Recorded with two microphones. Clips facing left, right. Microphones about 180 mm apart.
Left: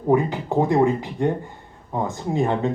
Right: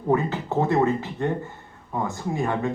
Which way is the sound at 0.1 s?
15° left (ahead or behind).